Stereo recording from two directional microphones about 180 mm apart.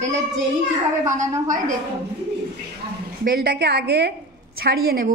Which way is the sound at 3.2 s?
60° right (ahead or behind).